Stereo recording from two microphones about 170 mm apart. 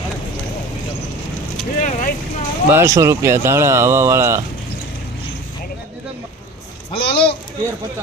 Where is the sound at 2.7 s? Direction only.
15° right (ahead or behind).